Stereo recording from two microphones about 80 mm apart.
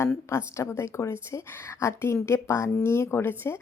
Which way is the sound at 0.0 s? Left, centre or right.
Left.